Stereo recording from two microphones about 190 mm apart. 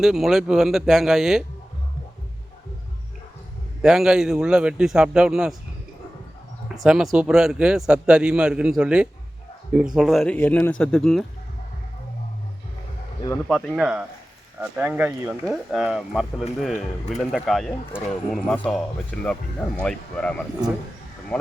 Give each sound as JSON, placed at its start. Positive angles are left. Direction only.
{"t": 0.0, "sound": "speech", "side_deg": 0}
{"t": 3.8, "sound": "speech", "side_deg": -5}
{"t": 6.8, "sound": "speech", "side_deg": -5}
{"t": 13.5, "sound": "speech", "side_deg": 0}